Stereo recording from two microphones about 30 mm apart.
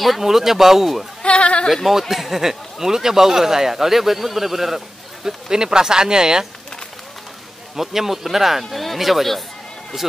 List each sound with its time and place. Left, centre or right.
0.2 s speech: centre
1.2 s speech: left
1.9 s speech: centre
5.2 s speech: right
7.7 s speech: centre